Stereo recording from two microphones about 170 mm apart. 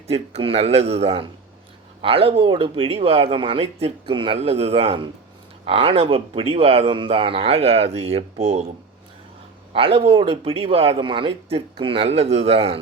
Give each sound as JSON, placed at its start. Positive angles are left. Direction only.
{"t": 0.1, "sound": "speech", "side_deg": -35}
{"t": 9.7, "sound": "speech", "side_deg": -35}